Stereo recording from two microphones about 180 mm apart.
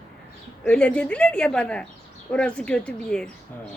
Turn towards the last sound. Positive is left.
turn(degrees=5)  # may be behind; listen again after turning